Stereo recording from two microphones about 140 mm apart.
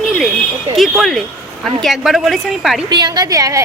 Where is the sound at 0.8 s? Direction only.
Centre (ahead or behind).